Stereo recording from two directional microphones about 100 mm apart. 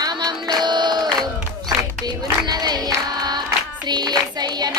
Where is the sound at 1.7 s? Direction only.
40° right (ahead or behind).